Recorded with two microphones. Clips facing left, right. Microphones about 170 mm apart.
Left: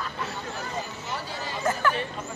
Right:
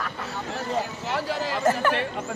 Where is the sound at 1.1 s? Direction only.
90° right.